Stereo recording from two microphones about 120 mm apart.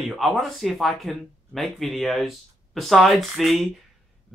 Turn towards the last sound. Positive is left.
turn(degrees=0)  # may be behind; listen again after turning